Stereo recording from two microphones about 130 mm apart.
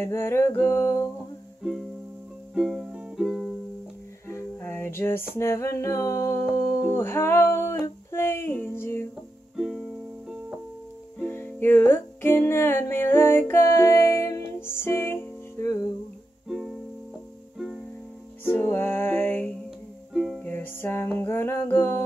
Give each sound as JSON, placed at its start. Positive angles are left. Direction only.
{"t": 0.0, "sound": "a sound", "side_deg": 20}
{"t": 1.6, "sound": "music", "side_deg": 0}
{"t": 4.3, "sound": "music", "side_deg": 20}
{"t": 6.9, "sound": "a sound", "side_deg": 20}
{"t": 9.6, "sound": "music", "side_deg": -5}
{"t": 11.1, "sound": "music", "side_deg": 15}
{"t": 16.4, "sound": "music", "side_deg": 0}
{"t": 18.4, "sound": "music", "side_deg": 15}
{"t": 20.1, "sound": "music", "side_deg": 0}
{"t": 20.4, "sound": "music", "side_deg": 15}